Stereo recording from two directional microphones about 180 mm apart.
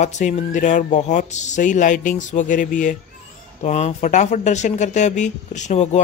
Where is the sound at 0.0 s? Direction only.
40° left (ahead or behind).